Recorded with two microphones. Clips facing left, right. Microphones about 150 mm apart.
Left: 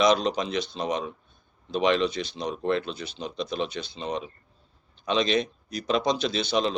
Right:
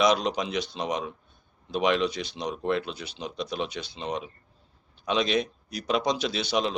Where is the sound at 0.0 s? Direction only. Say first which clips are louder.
Left 1 dB; 10° right (ahead or behind).